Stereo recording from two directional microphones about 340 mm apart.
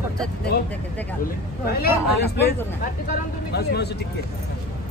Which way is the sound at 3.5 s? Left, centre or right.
Left.